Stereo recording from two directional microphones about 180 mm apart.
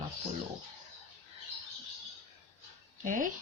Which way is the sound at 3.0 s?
45° right (ahead or behind).